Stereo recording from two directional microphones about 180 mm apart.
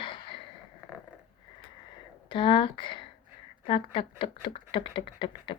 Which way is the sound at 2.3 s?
30° left (ahead or behind).